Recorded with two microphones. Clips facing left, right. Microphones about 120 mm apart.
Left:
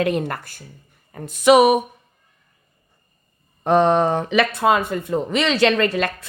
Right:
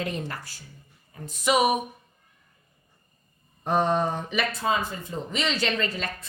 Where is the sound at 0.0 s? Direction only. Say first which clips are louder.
Left 10 dB; 65° left (ahead or behind).